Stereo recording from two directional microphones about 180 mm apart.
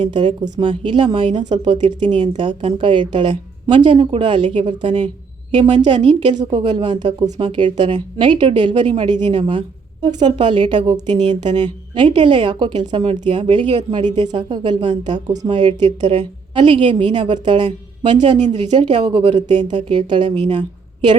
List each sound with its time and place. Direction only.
0.0 s a woman's voice: 25° right (ahead or behind)
11.4 s a woman's voice: 35° right (ahead or behind)
18.1 s a woman's voice: 40° right (ahead or behind)